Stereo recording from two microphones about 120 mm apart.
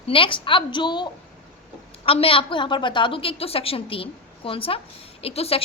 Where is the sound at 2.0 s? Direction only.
50° left (ahead or behind).